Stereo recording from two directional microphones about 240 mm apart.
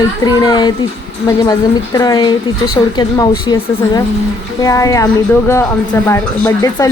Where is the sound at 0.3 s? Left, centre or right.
Centre.